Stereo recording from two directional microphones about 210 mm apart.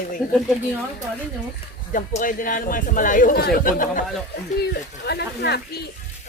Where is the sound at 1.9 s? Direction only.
40° left (ahead or behind).